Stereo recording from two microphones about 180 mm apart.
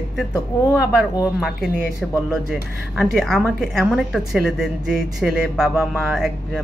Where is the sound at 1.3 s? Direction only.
Centre (ahead or behind).